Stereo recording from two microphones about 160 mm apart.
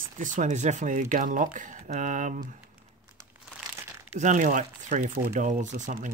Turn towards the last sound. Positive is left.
turn(degrees=-50)  # may be behind; listen again after turning